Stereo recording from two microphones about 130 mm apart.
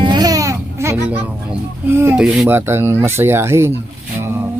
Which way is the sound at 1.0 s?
10° right (ahead or behind).